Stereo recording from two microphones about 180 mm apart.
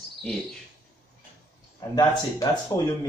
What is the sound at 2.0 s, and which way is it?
Speech, 20° left (ahead or behind).